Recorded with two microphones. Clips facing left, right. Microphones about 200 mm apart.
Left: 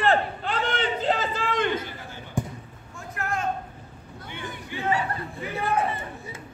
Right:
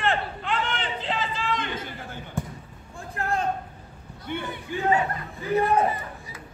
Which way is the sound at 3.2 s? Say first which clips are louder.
Right 3 dB; 30° right (ahead or behind).